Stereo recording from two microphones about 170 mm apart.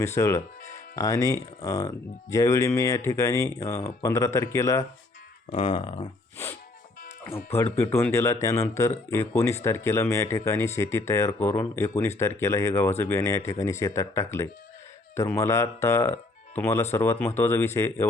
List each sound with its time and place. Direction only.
0.0 s speech: 15° left (ahead or behind)
5.5 s speech: 35° left (ahead or behind)
7.3 s speech: 15° left (ahead or behind)